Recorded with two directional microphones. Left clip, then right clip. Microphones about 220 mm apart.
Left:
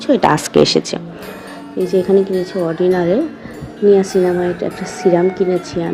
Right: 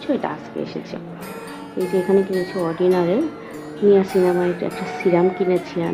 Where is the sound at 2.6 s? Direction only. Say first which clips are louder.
Left 3 dB; 15° left (ahead or behind).